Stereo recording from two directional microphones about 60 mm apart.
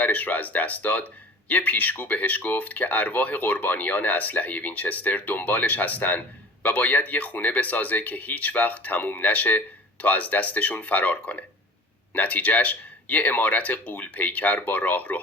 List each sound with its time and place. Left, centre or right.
0.0 s speech: left